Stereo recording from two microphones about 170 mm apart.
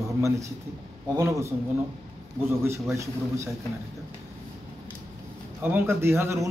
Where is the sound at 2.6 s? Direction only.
15° right (ahead or behind).